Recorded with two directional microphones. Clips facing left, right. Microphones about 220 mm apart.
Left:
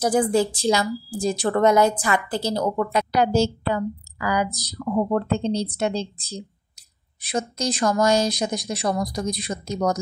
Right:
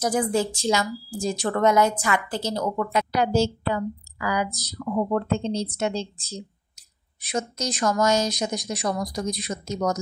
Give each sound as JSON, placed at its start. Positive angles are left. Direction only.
{"t": 0.0, "sound": "a woman's voice", "side_deg": 30}